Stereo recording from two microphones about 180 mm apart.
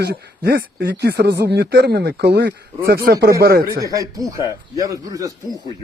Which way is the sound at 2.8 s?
55° right (ahead or behind).